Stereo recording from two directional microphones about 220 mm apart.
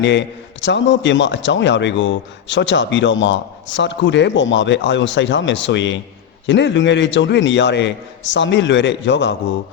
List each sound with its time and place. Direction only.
0.0 s a man's voice: 55° left (ahead or behind)